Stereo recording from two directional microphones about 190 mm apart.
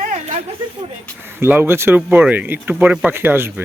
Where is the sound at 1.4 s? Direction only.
10° right (ahead or behind).